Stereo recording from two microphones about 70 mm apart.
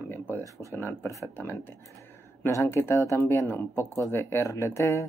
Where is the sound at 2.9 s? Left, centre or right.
Left.